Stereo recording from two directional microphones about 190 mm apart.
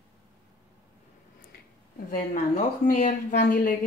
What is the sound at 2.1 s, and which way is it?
Speech, 45° left (ahead or behind).